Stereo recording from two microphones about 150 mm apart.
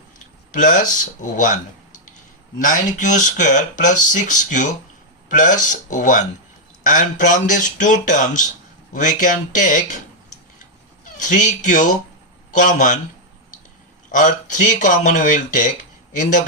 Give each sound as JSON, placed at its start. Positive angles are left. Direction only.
{"t": 0.5, "sound": "speech", "side_deg": 55}
{"t": 11.0, "sound": "speech", "side_deg": 55}
{"t": 14.1, "sound": "speech", "side_deg": 55}